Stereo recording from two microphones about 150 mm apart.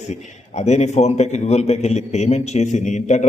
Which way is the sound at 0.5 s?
50° left (ahead or behind).